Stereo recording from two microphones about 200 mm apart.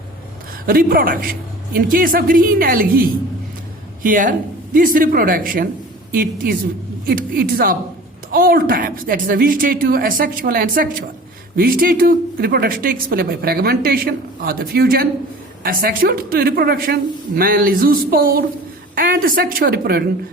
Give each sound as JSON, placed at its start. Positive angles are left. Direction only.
{"t": 0.7, "sound": "a woman's voice", "side_deg": -45}